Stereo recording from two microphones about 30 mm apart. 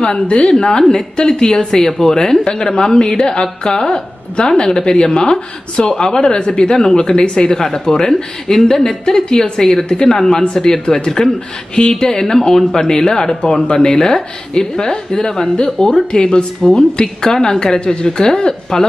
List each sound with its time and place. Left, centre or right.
0.3 s a woman's voice: left
0.6 s speech: left
7.5 s speech: left